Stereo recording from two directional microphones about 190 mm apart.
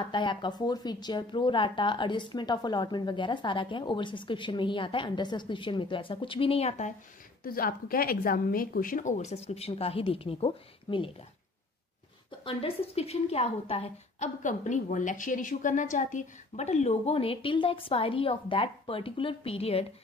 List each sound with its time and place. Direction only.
0.0 s speech: 25° left (ahead or behind)
7.4 s a woman's voice: 50° left (ahead or behind); by 11.1 s 30° left (ahead or behind)
12.3 s a woman's voice: 30° left (ahead or behind)